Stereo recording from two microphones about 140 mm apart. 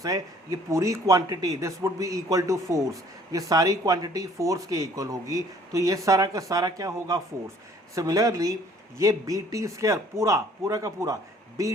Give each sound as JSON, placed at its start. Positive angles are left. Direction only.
{"t": 0.0, "sound": "speech", "side_deg": -25}